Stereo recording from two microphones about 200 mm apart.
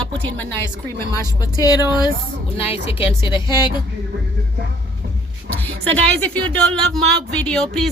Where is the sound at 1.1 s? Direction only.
15° left (ahead or behind).